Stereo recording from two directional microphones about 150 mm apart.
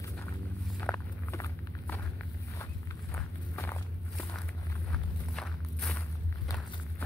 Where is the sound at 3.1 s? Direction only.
15° left (ahead or behind).